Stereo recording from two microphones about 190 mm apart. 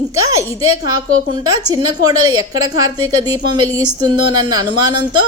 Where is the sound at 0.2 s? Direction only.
15° right (ahead or behind).